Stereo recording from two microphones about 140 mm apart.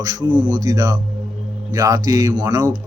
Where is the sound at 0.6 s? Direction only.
25° right (ahead or behind).